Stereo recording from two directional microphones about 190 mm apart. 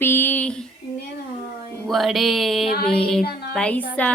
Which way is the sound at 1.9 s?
Centre (ahead or behind).